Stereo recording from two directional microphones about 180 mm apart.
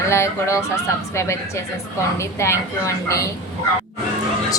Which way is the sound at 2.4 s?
15° left (ahead or behind).